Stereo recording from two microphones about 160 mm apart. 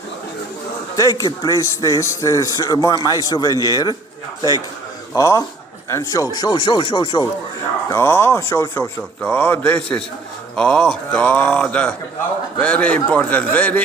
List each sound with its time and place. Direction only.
0.9 s a man's voice: 20° left (ahead or behind)
5.1 s a man's voice: 20° left (ahead or behind)
7.9 s speech: 15° left (ahead or behind)